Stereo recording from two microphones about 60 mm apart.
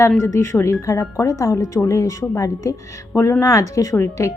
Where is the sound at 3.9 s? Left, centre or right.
Left.